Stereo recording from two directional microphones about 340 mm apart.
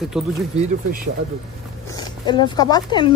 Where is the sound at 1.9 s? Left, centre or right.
Centre.